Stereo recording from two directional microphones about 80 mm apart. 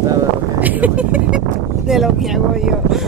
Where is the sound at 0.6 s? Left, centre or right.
Centre.